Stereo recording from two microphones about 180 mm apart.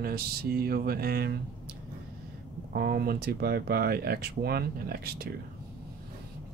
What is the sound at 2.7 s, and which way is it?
Speech, 60° right (ahead or behind).